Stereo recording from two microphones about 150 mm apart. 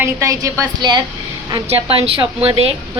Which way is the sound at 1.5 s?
40° right (ahead or behind).